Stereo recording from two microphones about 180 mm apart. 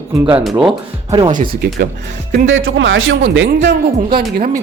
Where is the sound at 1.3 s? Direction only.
55° right (ahead or behind).